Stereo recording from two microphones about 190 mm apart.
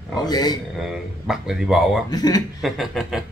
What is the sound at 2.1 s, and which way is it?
Speech, 20° left (ahead or behind).